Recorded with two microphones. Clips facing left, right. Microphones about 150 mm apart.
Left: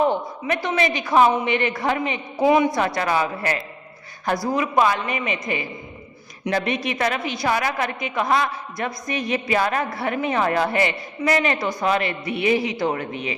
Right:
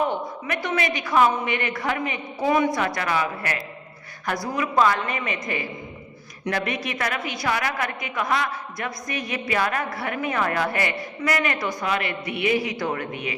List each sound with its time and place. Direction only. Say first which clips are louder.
0.0 s a woman's voice: left 4 dB; 30° left (ahead or behind)
2.7 s a woman's voice: left 3 dB; 30° left (ahead or behind)